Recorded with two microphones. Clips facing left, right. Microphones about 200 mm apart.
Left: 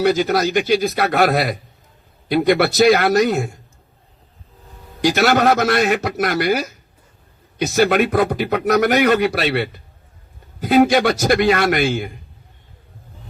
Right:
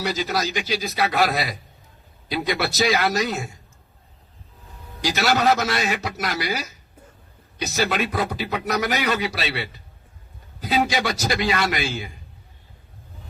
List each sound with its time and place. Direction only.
0.0 s a man's voice: 55° left (ahead or behind)
4.9 s a man's voice: 55° left (ahead or behind)